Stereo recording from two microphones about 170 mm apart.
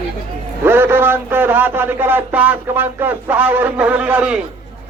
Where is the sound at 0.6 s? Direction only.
15° right (ahead or behind).